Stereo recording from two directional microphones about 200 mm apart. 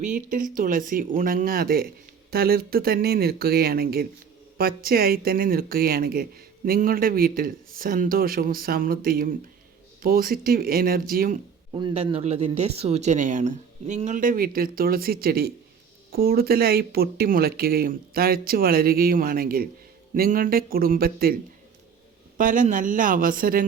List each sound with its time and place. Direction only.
0.0 s speech: 40° right (ahead or behind)
11.7 s speech: 25° right (ahead or behind); by 21.3 s 50° right (ahead or behind)
22.4 s speech: 40° right (ahead or behind)